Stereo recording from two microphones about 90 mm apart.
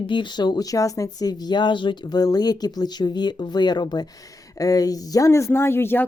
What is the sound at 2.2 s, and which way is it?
Speech, 45° left (ahead or behind).